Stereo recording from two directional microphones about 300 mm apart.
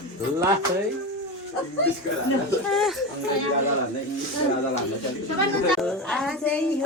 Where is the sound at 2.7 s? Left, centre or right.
Centre.